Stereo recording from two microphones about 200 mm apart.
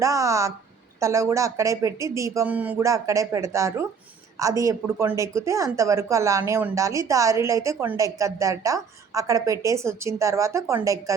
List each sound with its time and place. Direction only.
0.0 s speech: 15° right (ahead or behind)